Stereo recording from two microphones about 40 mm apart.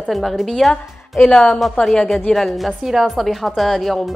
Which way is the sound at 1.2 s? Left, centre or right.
Centre.